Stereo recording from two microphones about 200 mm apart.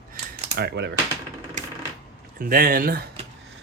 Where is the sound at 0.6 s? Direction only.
55° right (ahead or behind).